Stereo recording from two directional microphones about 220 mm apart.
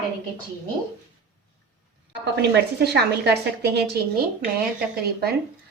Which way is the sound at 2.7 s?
50° right (ahead or behind).